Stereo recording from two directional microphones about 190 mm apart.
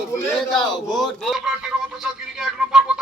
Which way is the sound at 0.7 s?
20° left (ahead or behind).